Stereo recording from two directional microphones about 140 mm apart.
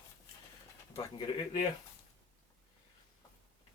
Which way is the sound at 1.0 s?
30° left (ahead or behind).